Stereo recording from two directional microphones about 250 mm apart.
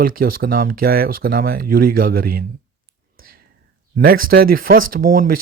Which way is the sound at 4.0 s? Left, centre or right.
Right.